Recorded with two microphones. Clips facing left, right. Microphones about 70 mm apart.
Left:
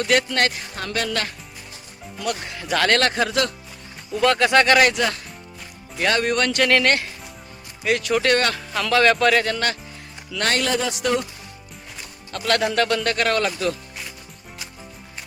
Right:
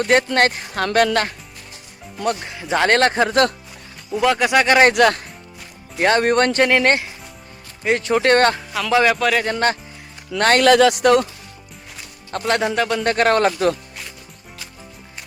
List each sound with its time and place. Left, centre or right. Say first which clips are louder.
0.0 s speech: right 4 dB; right
0.8 s speech: right 9 dB; right
2.4 s speech: even; right
4.1 s speech: right 1 dB; centre
4.9 s speech: right 8 dB; right
6.0 s speech: right 5 dB; right
6.8 s speech: right 3 dB; right
8.9 s speech: right 1 dB; centre
9.1 s speech: left 1 dB; centre
9.4 s speech: right 4 dB; right
10.3 s speech: right 7 dB; right
10.7 s speech: right 10 dB; right
12.5 s speech: right 1 dB; right